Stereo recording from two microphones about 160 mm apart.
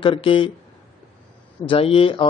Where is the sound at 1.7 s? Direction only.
35° left (ahead or behind).